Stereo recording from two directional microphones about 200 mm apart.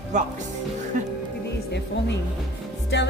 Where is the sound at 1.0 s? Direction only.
40° right (ahead or behind).